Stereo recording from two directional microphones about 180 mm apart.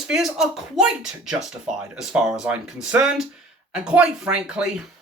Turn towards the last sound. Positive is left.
turn(degrees=-5)  # may be behind; listen again after turning